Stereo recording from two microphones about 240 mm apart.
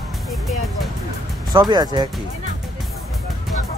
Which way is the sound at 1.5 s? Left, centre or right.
Centre.